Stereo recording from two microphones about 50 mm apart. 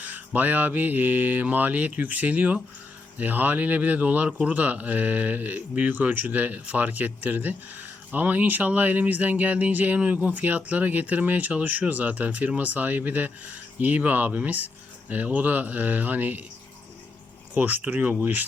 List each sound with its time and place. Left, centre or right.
0.0 s speech: right
17.5 s speech: right